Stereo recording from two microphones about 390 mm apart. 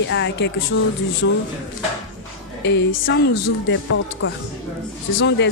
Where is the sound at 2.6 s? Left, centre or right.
Left.